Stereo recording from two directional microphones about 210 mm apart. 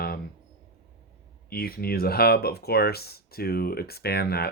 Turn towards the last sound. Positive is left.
turn(degrees=50)  # may be behind; listen again after turning